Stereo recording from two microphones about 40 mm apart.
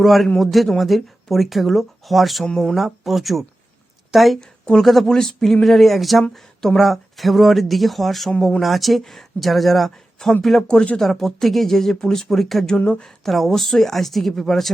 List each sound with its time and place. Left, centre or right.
0.0 s speech: centre
4.4 s speech: centre
4.8 s speech: centre
12.9 s speech: centre